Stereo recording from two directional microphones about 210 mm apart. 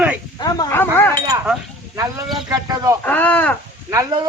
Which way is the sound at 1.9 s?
15° right (ahead or behind).